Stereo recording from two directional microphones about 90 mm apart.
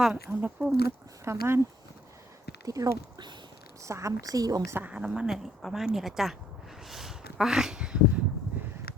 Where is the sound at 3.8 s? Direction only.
35° right (ahead or behind).